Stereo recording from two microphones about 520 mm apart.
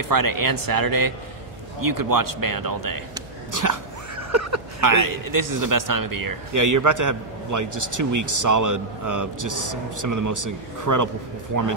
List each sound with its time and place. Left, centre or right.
0.1 s a man's voice: right